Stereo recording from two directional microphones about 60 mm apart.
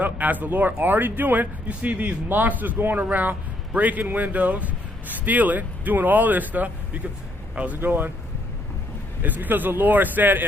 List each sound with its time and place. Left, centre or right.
0.0 s speech: right
7.8 s speech: right
9.2 s speech: right